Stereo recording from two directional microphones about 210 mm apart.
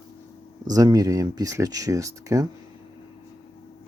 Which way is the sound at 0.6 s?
15° right (ahead or behind).